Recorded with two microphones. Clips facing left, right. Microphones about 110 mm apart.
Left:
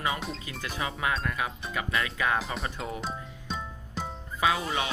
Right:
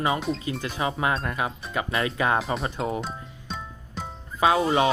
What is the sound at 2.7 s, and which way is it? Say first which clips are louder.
Speech: right 7 dB; 30° right (ahead or behind).